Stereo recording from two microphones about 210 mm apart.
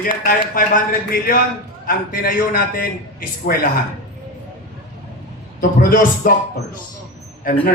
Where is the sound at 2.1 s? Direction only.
45° left (ahead or behind).